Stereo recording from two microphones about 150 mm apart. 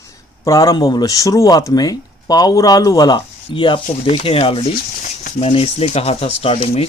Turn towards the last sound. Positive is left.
turn(degrees=40)  # may be behind; listen again after turning